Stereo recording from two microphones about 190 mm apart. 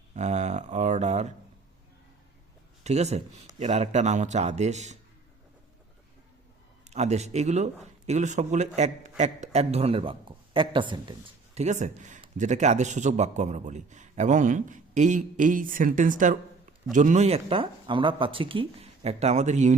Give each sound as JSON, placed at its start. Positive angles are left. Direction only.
{"t": 0.1, "sound": "a sound", "side_deg": -35}
{"t": 2.8, "sound": "speech", "side_deg": -35}
{"t": 6.8, "sound": "speech", "side_deg": -35}
{"t": 11.6, "sound": "speech", "side_deg": -40}